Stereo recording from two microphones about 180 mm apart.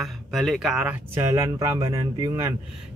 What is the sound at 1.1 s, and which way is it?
Speech, 15° right (ahead or behind).